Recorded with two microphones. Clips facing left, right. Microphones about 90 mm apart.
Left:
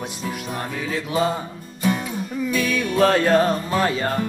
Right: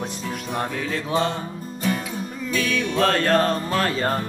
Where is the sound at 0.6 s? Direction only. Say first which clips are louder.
Right 3 dB; 5° left (ahead or behind).